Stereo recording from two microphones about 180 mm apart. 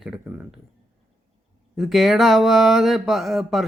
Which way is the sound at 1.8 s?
Centre (ahead or behind).